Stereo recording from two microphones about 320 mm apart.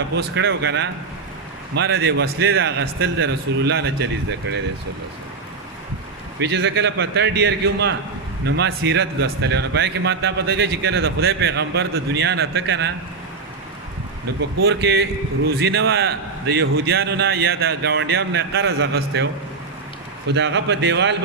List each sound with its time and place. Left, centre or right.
0.2 s a man's voice: right
6.4 s a man's voice: right
14.6 s a man's voice: right
20.3 s a man's voice: right